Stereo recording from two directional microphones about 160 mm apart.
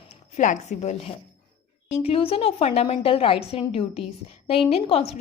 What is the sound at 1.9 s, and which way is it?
A woman's voice, 35° left (ahead or behind).